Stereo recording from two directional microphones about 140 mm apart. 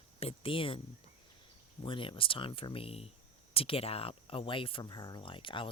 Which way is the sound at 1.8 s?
40° left (ahead or behind).